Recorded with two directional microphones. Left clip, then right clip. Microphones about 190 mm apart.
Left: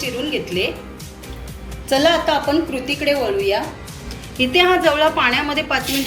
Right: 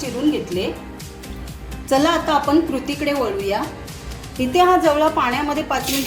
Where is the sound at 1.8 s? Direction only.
50° right (ahead or behind).